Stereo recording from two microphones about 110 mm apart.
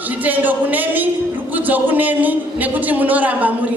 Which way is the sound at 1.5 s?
15° right (ahead or behind).